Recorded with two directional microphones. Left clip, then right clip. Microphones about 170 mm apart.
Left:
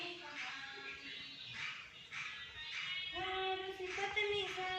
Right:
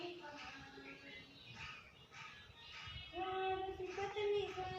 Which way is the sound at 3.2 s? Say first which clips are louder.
Right 1 dB; 45° right (ahead or behind).